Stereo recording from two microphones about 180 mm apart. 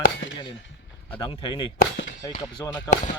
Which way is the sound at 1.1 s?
30° left (ahead or behind).